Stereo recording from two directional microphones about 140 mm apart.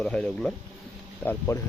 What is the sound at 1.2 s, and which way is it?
Speech, 15° left (ahead or behind).